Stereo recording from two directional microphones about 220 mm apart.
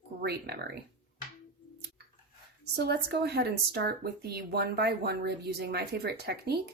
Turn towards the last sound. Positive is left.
turn(degrees=-45)  # may be behind; listen again after turning